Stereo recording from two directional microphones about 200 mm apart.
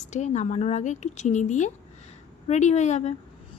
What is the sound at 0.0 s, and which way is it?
A woman's voice, 35° left (ahead or behind).